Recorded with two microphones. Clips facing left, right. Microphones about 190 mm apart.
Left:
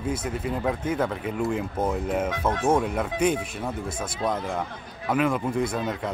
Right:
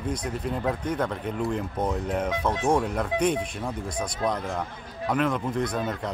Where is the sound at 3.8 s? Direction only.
25° left (ahead or behind).